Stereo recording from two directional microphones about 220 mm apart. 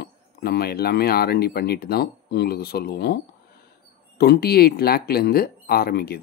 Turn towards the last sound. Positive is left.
turn(degrees=45)  # may be behind; listen again after turning